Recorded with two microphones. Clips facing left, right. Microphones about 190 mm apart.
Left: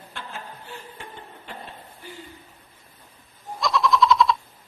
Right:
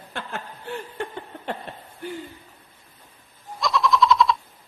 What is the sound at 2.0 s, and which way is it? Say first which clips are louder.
Hoot: right 11 dB; 60° right (ahead or behind).